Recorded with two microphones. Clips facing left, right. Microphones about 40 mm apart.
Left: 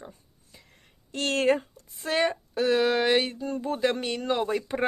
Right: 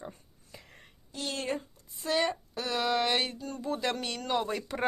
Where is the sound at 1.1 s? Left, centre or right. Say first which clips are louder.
Left 10 dB; left.